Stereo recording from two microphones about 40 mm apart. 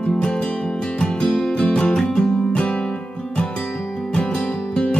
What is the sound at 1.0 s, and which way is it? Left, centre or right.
Music, centre.